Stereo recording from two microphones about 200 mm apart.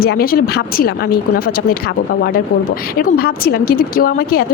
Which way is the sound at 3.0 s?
50° left (ahead or behind).